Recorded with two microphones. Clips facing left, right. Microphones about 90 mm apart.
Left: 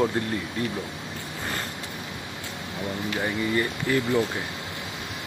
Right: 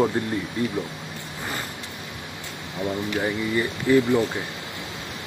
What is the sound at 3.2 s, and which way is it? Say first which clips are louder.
Speech: even; 15° right (ahead or behind).